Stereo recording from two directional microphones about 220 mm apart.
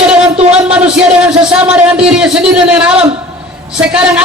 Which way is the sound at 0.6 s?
5° right (ahead or behind).